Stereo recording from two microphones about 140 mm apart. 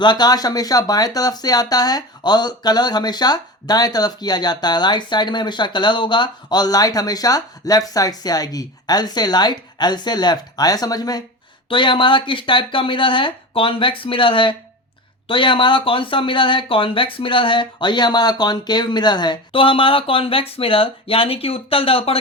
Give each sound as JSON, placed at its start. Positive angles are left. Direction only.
{"t": 0.0, "sound": "speech", "side_deg": 30}